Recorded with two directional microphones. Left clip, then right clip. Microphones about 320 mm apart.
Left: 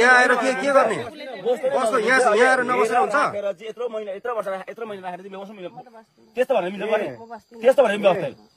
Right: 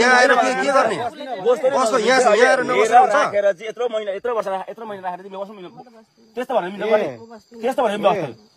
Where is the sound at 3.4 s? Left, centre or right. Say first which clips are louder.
Right 8 dB; right.